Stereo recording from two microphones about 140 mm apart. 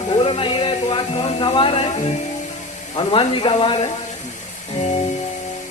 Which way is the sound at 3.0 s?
40° left (ahead or behind).